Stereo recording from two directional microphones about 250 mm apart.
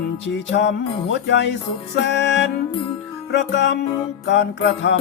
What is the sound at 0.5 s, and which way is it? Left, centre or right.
Music, left.